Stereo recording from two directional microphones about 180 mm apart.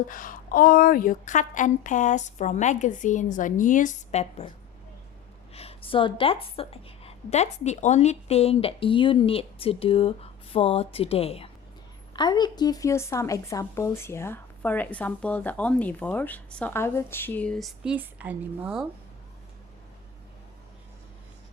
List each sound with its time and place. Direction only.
0.1 s a woman's voice: 50° left (ahead or behind)
5.5 s a woman's voice: 30° left (ahead or behind); by 18.9 s 5° right (ahead or behind)